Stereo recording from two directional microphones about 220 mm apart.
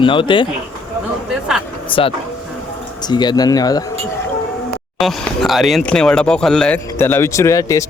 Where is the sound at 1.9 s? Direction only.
25° left (ahead or behind).